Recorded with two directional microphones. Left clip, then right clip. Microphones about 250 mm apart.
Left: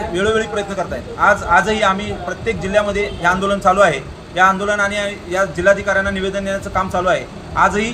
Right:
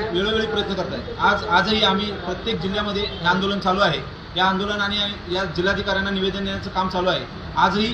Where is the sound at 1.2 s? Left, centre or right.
Left.